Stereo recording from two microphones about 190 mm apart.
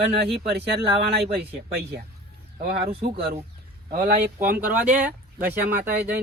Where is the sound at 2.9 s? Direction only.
30° right (ahead or behind).